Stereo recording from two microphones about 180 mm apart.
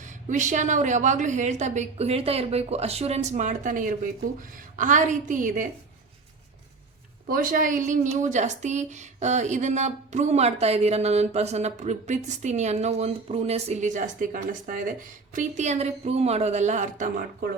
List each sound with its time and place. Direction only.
0.0 s a woman's voice: 45° right (ahead or behind)
7.3 s a woman's voice: 50° right (ahead or behind)